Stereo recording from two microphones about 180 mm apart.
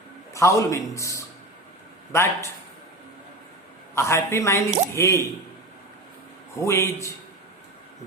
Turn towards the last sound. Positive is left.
turn(degrees=15)  # may be behind; listen again after turning